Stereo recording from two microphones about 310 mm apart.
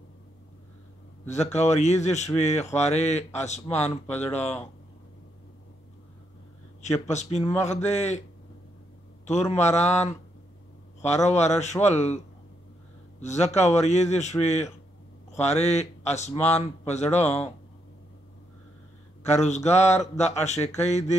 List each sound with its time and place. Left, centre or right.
1.4 s speech: left
6.8 s speech: left
9.2 s speech: left
11.2 s speech: left
13.2 s speech: left
19.2 s speech: left